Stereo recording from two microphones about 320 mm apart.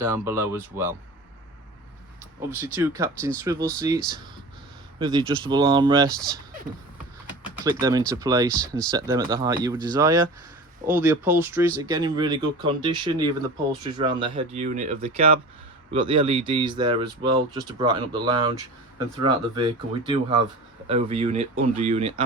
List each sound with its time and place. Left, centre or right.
0.0 s speech: centre
2.7 s speech: centre
6.1 s speech: centre
7.6 s speech: centre